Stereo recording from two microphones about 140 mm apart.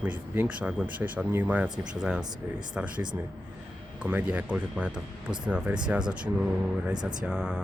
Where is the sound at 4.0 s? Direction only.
10° right (ahead or behind).